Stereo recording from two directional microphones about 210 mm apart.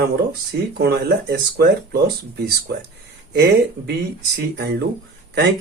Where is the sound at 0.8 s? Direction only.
50° right (ahead or behind).